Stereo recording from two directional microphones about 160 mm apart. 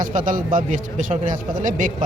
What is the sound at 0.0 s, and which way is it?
Speech, 60° right (ahead or behind).